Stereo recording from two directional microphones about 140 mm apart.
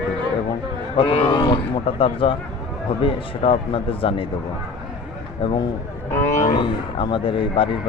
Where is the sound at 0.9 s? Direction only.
40° left (ahead or behind).